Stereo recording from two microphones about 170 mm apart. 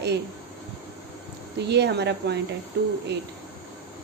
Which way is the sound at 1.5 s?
80° right.